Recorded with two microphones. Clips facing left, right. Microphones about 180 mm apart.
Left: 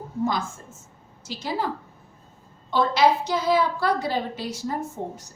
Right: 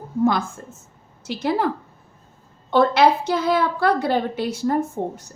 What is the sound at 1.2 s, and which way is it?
A woman's voice, 60° right (ahead or behind).